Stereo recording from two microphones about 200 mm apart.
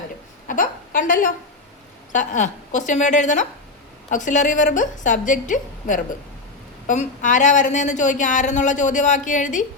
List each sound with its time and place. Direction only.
0.4 s a woman's voice: 40° left (ahead or behind)